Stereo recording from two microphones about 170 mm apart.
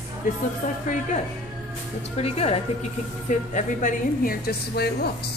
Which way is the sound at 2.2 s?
35° left (ahead or behind).